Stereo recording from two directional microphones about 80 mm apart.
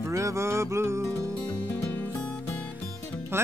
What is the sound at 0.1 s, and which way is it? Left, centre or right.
Music, right.